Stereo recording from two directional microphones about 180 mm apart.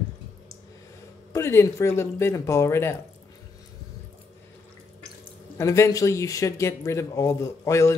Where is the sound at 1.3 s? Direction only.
15° left (ahead or behind).